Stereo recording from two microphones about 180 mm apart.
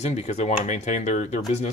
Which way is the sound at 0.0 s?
35° left (ahead or behind).